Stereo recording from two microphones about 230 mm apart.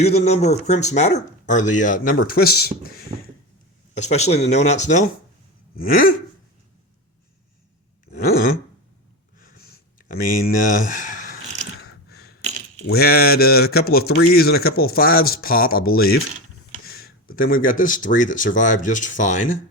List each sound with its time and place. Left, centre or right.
0.0 s speech: left
3.9 s speech: left
9.4 s a sound: left
12.4 s coin: right
12.9 s speech: left